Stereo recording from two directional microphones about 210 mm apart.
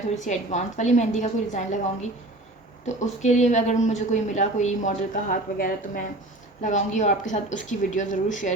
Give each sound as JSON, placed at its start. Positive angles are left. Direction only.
{"t": 0.2, "sound": "a woman's voice", "side_deg": 35}